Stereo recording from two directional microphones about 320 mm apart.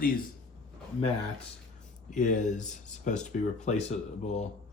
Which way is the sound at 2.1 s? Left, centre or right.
Left.